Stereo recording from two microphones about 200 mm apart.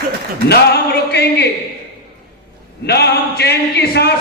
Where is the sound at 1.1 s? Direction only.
55° left (ahead or behind).